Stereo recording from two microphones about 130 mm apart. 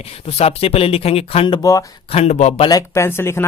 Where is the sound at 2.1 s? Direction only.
55° left (ahead or behind).